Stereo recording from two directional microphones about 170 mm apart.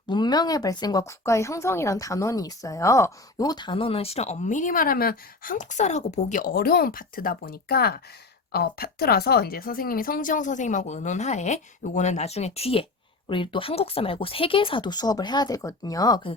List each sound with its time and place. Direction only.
0.1 s speech: 25° left (ahead or behind)